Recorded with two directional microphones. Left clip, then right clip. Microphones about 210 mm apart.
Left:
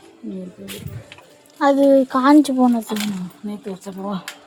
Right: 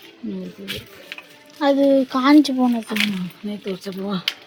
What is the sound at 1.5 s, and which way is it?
Speech, 10° left (ahead or behind).